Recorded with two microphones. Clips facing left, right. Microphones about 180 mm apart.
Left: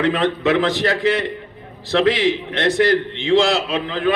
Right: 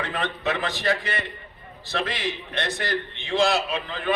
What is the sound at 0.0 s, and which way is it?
A man's voice, 90° left.